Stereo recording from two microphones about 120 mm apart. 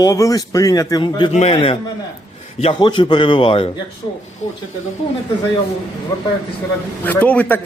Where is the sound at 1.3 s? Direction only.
65° left (ahead or behind).